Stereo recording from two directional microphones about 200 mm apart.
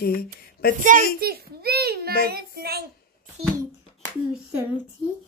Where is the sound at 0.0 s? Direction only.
50° left (ahead or behind).